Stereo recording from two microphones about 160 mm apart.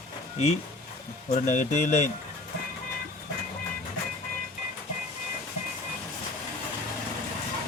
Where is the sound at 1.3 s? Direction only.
45° left (ahead or behind).